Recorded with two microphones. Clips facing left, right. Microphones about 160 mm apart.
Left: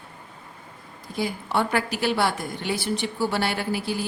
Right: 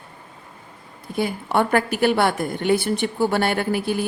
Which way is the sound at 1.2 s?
55° right (ahead or behind).